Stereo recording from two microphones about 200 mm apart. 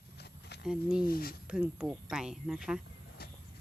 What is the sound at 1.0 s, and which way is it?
Speech, 50° left (ahead or behind).